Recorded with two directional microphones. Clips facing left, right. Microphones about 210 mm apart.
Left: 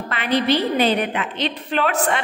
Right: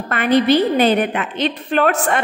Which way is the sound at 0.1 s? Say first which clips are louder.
Right 6 dB; 50° right (ahead or behind).